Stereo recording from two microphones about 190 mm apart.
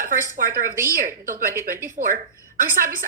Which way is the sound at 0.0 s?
45° right (ahead or behind).